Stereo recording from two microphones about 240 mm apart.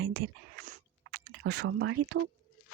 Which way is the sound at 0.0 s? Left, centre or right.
Right.